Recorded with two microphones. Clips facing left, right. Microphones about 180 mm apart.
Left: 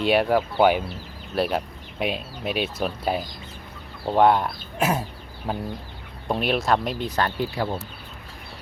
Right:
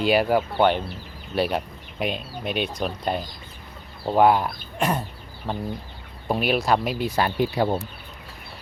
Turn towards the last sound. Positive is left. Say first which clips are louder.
# right 4 dB
turn(degrees=-30)  # may be behind; listen again after turning